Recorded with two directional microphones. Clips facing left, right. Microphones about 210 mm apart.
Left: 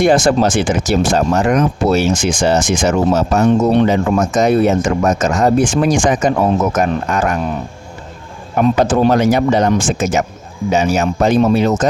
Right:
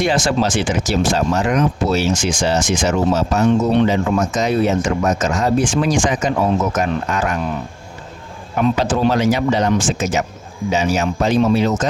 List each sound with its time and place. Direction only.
0.0 s speech: 50° left (ahead or behind)
8.5 s speech: 50° left (ahead or behind)